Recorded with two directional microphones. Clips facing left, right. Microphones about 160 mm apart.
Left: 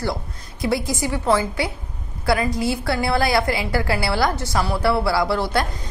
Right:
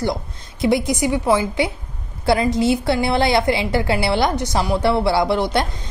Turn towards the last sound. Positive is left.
turn(degrees=-20)  # may be behind; listen again after turning